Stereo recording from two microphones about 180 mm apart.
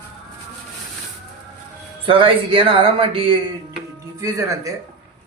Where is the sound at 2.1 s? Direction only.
30° right (ahead or behind).